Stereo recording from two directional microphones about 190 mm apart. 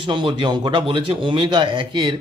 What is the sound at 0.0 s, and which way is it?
Speech, 25° right (ahead or behind).